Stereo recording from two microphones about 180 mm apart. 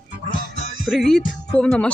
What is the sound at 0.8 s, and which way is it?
Music, centre (ahead or behind).